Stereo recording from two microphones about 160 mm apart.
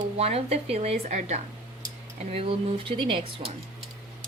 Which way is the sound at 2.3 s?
35° right (ahead or behind).